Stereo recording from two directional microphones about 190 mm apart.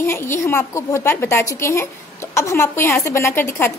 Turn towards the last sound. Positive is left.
turn(degrees=15)  # may be behind; listen again after turning